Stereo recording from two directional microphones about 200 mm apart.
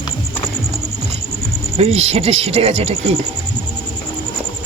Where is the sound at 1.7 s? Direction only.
30° right (ahead or behind).